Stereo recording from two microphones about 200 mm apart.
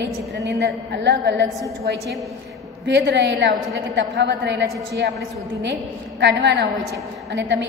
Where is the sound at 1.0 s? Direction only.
60° right (ahead or behind).